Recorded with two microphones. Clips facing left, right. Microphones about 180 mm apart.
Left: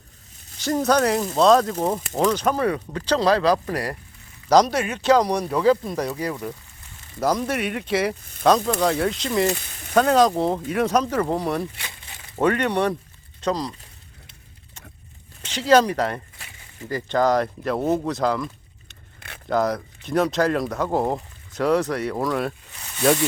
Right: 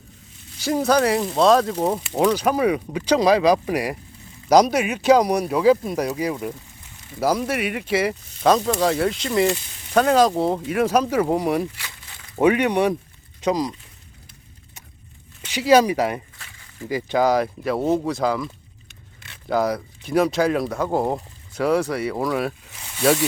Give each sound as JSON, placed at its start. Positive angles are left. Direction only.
{"t": 0.6, "sound": "speech", "side_deg": -5}
{"t": 11.8, "sound": "a sound", "side_deg": 25}
{"t": 12.4, "sound": "speech", "side_deg": -10}
{"t": 15.4, "sound": "speech", "side_deg": -10}
{"t": 19.5, "sound": "speech", "side_deg": -5}